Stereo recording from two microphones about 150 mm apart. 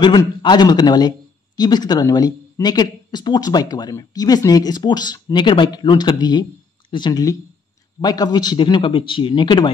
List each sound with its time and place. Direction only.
0.4 s speech: 30° left (ahead or behind)